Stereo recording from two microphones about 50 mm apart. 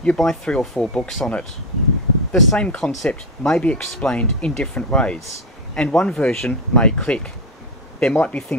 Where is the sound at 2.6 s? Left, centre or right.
Centre.